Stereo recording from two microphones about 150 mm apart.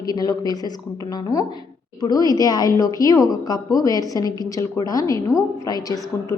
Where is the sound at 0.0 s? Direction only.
25° left (ahead or behind).